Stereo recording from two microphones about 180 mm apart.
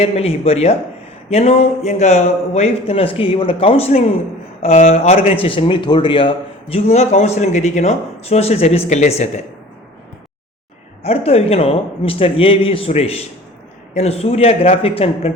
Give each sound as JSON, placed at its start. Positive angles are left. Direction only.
{"t": 0.0, "sound": "speech", "side_deg": 35}
{"t": 11.0, "sound": "speech", "side_deg": 35}